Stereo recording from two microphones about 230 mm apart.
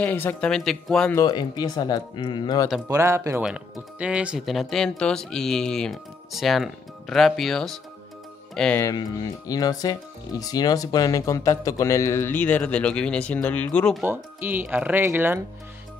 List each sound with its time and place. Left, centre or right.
0.0 s speech: centre
1.2 s speech: centre
2.9 s speech: centre
14.0 s speech: centre